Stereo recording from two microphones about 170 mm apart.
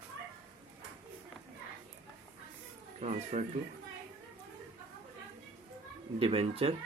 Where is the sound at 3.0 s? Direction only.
40° right (ahead or behind).